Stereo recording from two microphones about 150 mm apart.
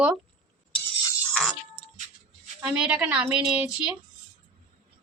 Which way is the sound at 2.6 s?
5° right (ahead or behind).